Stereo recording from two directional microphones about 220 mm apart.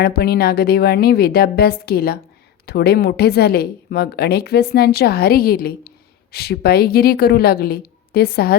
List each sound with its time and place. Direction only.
0.0 s speech: 45° left (ahead or behind)